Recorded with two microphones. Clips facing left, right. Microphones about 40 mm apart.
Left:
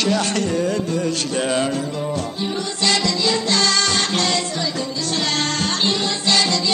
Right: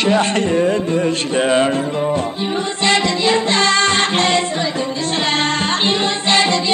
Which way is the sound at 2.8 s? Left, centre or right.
Right.